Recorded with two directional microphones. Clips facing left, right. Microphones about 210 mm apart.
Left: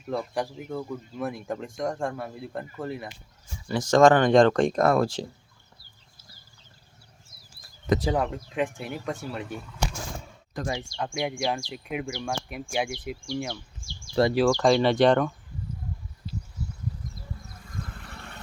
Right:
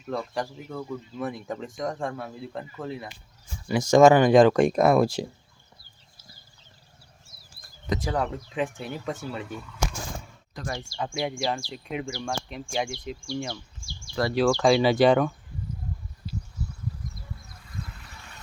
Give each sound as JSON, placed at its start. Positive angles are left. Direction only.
{"t": 0.0, "sound": "speech", "side_deg": 5}
{"t": 3.7, "sound": "speech", "side_deg": -10}
{"t": 8.1, "sound": "speech", "side_deg": 5}
{"t": 10.8, "sound": "speech", "side_deg": -5}
{"t": 14.2, "sound": "speech", "side_deg": 30}
{"t": 14.6, "sound": "speech", "side_deg": -5}
{"t": 18.0, "sound": "vehicle", "side_deg": 60}